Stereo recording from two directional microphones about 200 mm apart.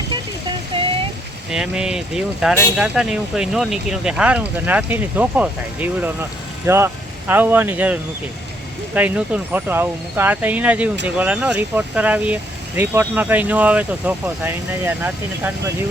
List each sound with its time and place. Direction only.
0.7 s a sound: 25° right (ahead or behind)
1.5 s speech: 5° right (ahead or behind)
9.0 s speech: 5° right (ahead or behind)